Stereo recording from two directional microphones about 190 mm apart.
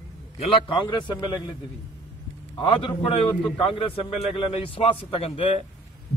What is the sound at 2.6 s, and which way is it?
A man's voice, 25° left (ahead or behind).